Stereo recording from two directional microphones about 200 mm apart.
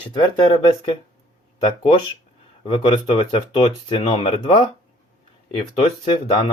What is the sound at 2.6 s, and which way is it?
Speech, 25° left (ahead or behind).